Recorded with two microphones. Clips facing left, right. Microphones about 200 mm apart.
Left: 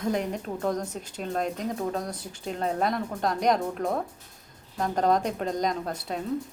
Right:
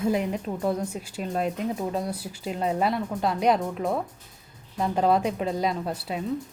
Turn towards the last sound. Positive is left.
turn(degrees=-5)  # may be behind; listen again after turning